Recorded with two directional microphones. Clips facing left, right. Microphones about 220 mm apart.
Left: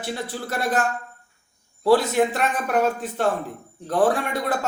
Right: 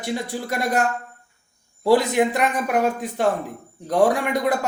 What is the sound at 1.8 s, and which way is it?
A man's voice, 15° right (ahead or behind).